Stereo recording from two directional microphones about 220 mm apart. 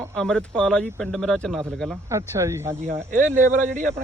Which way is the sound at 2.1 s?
10° right (ahead or behind).